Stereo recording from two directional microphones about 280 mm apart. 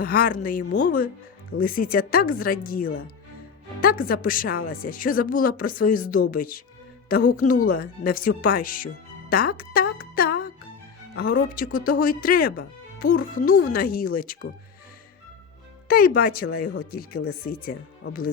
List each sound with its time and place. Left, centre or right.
0.0 s speech: left
10.0 s music: left
11.1 s speech: left
15.9 s speech: left